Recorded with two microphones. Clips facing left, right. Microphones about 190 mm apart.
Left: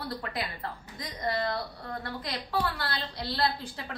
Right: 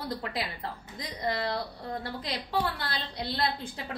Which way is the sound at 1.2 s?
20° right (ahead or behind).